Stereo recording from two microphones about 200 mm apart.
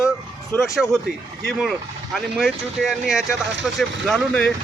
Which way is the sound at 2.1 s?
Centre (ahead or behind).